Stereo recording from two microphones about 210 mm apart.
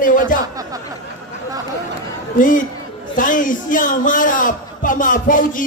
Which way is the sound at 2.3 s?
40° left (ahead or behind).